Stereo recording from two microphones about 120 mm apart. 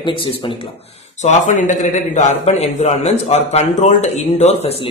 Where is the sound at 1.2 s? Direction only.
90° left.